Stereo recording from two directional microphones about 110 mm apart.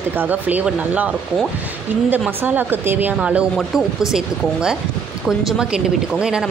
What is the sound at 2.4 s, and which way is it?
Speech, 20° right (ahead or behind).